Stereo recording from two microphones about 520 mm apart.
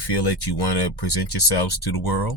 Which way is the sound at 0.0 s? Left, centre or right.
Left.